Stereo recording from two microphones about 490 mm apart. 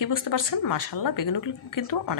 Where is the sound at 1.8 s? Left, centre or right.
Left.